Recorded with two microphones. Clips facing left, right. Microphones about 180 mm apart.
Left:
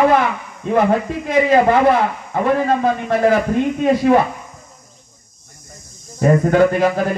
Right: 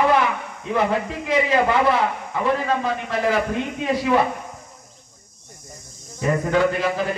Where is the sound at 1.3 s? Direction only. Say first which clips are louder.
Left 6 dB; 50° left (ahead or behind).